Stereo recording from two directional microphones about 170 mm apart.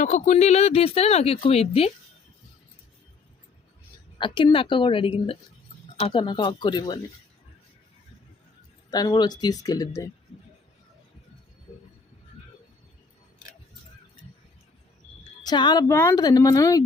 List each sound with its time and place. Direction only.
0.0 s speech: 45° left (ahead or behind)
4.2 s a woman's voice: 25° left (ahead or behind)
8.9 s a woman's voice: 25° left (ahead or behind)
15.4 s a woman's voice: 25° left (ahead or behind)